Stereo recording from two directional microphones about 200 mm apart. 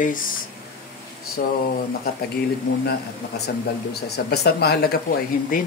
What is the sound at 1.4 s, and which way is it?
Speech, 45° left (ahead or behind).